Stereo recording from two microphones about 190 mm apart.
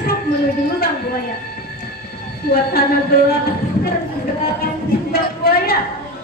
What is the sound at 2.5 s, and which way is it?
Speech, 55° left (ahead or behind).